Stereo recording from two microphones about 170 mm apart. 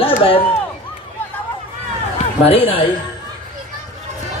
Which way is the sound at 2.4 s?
35° left (ahead or behind).